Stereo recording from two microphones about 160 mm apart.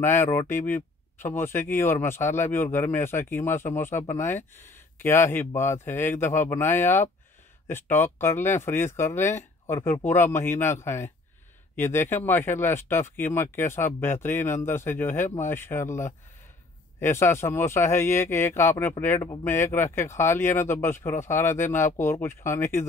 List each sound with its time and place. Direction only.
0.0 s speech: 15° left (ahead or behind)
5.0 s speech: 15° left (ahead or behind)